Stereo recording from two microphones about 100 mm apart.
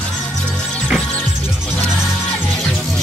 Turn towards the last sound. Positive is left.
turn(degrees=5)  # may be behind; listen again after turning